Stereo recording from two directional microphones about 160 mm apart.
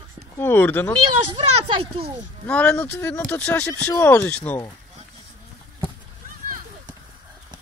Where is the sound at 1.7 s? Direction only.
35° right (ahead or behind).